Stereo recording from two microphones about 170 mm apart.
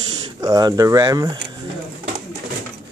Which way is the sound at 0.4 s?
20° right (ahead or behind).